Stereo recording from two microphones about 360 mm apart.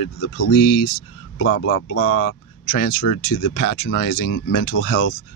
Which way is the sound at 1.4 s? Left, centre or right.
Left.